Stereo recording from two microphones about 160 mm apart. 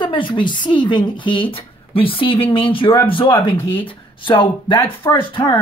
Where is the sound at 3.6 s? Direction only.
15° left (ahead or behind).